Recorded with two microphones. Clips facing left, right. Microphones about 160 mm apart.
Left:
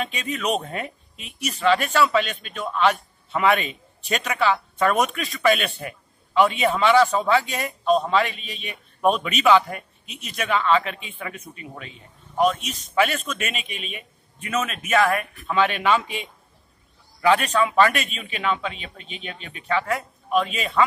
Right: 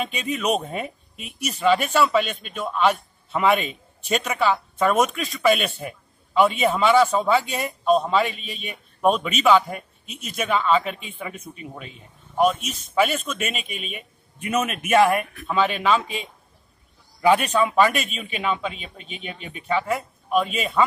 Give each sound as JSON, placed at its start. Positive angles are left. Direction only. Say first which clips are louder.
{"t": 0.0, "sound": "speech", "louder": "right 1 dB", "side_deg": -5}
{"t": 10.0, "sound": "speech", "louder": "right 2 dB", "side_deg": -45}
{"t": 10.3, "sound": "speech", "louder": "even", "side_deg": -5}
{"t": 14.5, "sound": "a man's voice", "louder": "right 3 dB", "side_deg": -15}
{"t": 15.4, "sound": "speech", "louder": "left 1 dB", "side_deg": -5}
{"t": 17.2, "sound": "a man's voice", "louder": "right 1 dB", "side_deg": -15}
{"t": 17.9, "sound": "a man's voice", "louder": "right 1 dB", "side_deg": 0}